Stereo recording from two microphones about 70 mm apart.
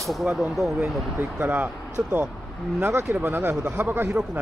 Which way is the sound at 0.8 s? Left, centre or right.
Right.